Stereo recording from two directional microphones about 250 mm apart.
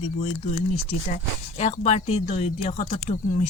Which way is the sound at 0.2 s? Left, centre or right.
Left.